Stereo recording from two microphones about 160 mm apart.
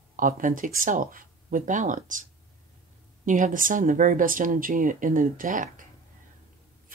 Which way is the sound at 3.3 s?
55° right (ahead or behind).